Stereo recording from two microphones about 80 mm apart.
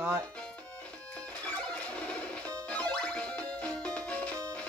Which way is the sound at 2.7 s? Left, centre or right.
Centre.